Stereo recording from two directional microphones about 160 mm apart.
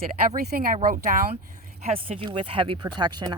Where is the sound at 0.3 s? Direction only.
60° right (ahead or behind).